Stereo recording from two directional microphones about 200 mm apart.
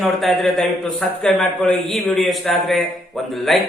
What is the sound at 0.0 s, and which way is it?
A man's voice, centre (ahead or behind).